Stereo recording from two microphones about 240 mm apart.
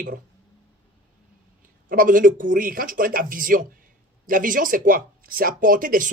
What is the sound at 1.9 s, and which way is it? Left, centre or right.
Speech, right.